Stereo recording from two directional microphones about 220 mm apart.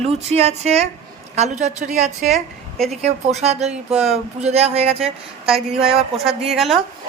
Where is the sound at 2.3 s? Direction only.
Centre (ahead or behind).